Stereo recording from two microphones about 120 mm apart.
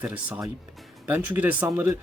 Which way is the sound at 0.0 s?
10° right (ahead or behind).